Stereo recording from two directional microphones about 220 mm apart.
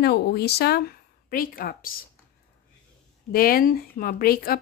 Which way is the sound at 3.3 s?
40° left (ahead or behind).